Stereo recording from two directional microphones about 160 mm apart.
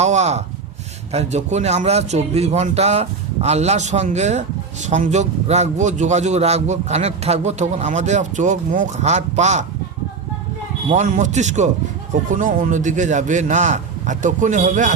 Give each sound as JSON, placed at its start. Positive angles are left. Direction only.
{"t": 0.0, "sound": "a sound", "side_deg": -45}
{"t": 1.1, "sound": "a man's voice", "side_deg": -45}
{"t": 10.9, "sound": "a man's voice", "side_deg": -50}